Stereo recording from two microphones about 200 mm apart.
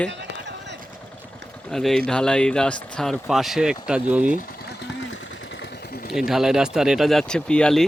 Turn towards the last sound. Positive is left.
turn(degrees=5)  # may be behind; listen again after turning